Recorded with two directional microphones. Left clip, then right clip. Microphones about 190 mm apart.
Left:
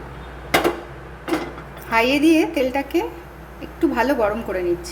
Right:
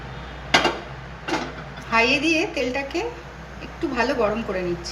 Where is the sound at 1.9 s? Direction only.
70° left (ahead or behind).